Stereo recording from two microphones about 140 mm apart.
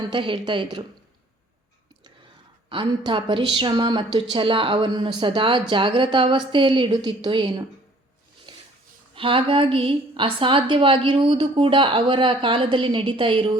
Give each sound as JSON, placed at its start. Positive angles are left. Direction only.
{"t": 0.1, "sound": "a woman's voice", "side_deg": -35}
{"t": 2.6, "sound": "a woman's voice", "side_deg": -35}
{"t": 9.1, "sound": "a woman's voice", "side_deg": -40}